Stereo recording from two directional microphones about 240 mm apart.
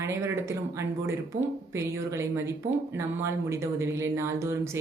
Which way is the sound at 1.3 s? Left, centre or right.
Right.